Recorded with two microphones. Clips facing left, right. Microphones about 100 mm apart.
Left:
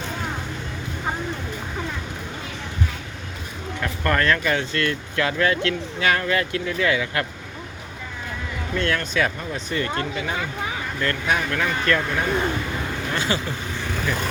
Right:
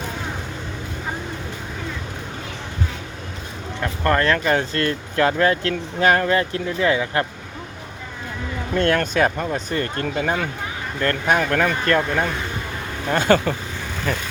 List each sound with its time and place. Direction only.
3.8 s speech: 30° right (ahead or behind)
8.7 s speech: 45° right (ahead or behind)
13.1 s speech: 55° right (ahead or behind)